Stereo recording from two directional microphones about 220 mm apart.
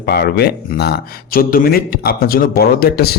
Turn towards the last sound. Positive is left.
turn(degrees=45)  # may be behind; listen again after turning